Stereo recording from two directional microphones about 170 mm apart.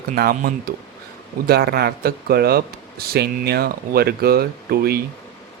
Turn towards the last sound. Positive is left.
turn(degrees=-65)  # may be behind; listen again after turning